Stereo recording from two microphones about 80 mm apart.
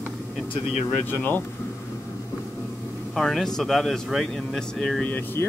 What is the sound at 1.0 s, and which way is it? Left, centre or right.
Speech, left.